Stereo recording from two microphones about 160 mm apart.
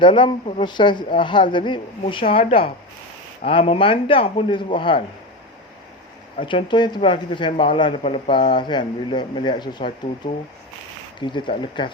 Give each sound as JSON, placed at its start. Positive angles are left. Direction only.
{"t": 0.0, "sound": "speech", "side_deg": 30}
{"t": 6.4, "sound": "speech", "side_deg": 30}
{"t": 11.2, "sound": "speech", "side_deg": 30}